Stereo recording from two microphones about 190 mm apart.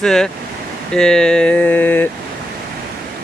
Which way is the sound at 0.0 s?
5° left (ahead or behind).